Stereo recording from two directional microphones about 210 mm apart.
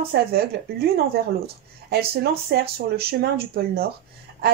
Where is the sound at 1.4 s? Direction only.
45° right (ahead or behind).